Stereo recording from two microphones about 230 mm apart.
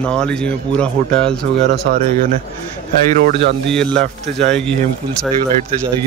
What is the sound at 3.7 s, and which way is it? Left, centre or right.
Speech, centre.